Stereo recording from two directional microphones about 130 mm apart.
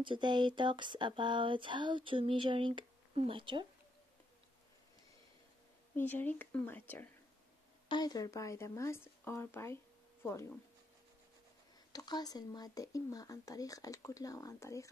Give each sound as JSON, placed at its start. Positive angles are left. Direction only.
{"t": 0.0, "sound": "speech", "side_deg": -35}
{"t": 5.9, "sound": "speech", "side_deg": 15}
{"t": 7.9, "sound": "speech", "side_deg": 30}
{"t": 11.9, "sound": "speech", "side_deg": 30}